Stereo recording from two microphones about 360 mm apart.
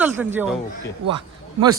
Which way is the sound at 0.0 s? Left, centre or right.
Centre.